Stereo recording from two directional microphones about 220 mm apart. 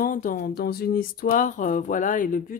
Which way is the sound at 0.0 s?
40° left (ahead or behind).